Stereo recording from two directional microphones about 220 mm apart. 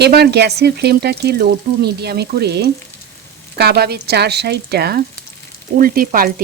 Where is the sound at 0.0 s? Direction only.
50° right (ahead or behind).